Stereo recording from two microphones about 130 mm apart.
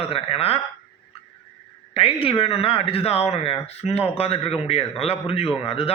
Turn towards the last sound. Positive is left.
turn(degrees=50)  # may be behind; listen again after turning